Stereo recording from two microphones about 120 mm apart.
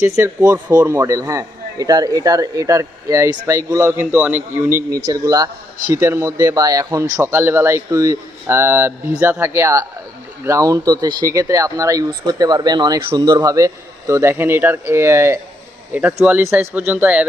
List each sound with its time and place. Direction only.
0.0 s a man's voice: 20° right (ahead or behind)
5.0 s a man's voice: 30° right (ahead or behind)
13.2 s a man's voice: 30° right (ahead or behind); by 17.2 s 10° right (ahead or behind)